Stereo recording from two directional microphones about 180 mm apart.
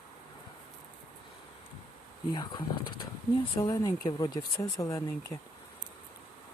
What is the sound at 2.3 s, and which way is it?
Speech, 25° left (ahead or behind).